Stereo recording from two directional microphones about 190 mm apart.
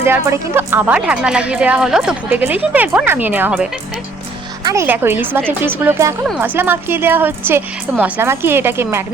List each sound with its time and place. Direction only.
0.0 s a woman's voice: 10° right (ahead or behind)
4.6 s a woman's voice: 15° right (ahead or behind)